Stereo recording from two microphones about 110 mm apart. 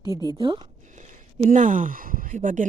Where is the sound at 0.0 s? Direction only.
35° right (ahead or behind).